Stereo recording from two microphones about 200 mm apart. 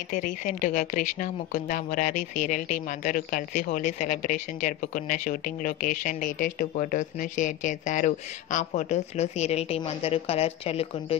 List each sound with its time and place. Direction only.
0.1 s speech: 40° left (ahead or behind)